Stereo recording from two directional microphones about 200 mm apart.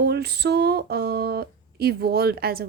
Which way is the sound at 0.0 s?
55° right (ahead or behind).